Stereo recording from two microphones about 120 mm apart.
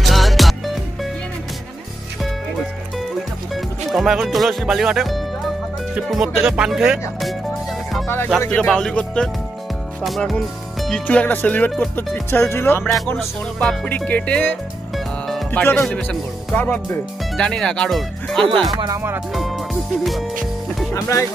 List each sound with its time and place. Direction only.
0.0 s music: centre (ahead or behind)
3.9 s speech: centre (ahead or behind)
8.5 s music: 5° left (ahead or behind)
10.0 s speech: centre (ahead or behind)
11.1 s music: 10° left (ahead or behind)
11.7 s speech: 5° left (ahead or behind)
12.3 s speech: 20° left (ahead or behind)
13.2 s speech: 5° left (ahead or behind)
13.8 s music: 15° left (ahead or behind)
15.5 s speech: 20° left (ahead or behind)
17.4 s speech: 5° left (ahead or behind)
19.3 s music: centre (ahead or behind)
20.9 s speech: 25° left (ahead or behind)